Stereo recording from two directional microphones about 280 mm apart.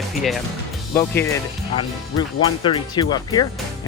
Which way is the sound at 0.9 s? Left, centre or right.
Centre.